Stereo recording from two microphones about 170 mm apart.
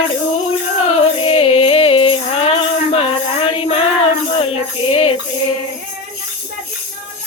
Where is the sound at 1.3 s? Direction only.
35° left (ahead or behind).